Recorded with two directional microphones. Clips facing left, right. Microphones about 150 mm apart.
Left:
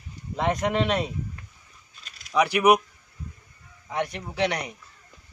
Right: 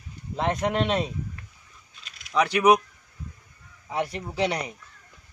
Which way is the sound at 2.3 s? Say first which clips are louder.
Even; 10° left (ahead or behind).